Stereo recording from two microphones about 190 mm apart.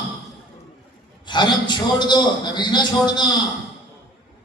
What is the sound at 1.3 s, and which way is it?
A man's voice, 25° left (ahead or behind).